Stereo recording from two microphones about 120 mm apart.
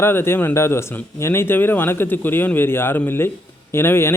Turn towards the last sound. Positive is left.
turn(degrees=20)  # may be behind; listen again after turning